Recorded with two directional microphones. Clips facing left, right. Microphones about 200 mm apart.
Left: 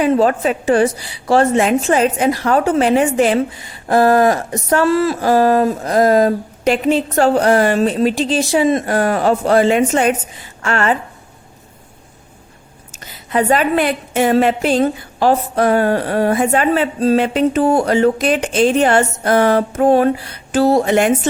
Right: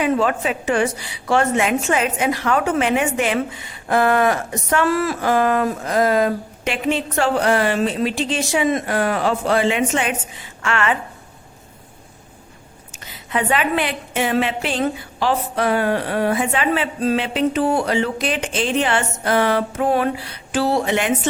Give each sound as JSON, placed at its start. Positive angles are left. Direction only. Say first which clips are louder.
{"t": 0.0, "sound": "a woman's voice", "louder": "left 5 dB", "side_deg": 40}
{"t": 13.3, "sound": "a woman's voice", "louder": "left 5 dB", "side_deg": 40}